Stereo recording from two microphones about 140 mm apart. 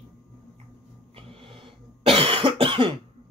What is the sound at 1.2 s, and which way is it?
Cough, 40° right (ahead or behind).